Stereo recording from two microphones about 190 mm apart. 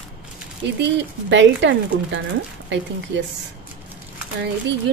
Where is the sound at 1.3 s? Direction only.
75° right (ahead or behind).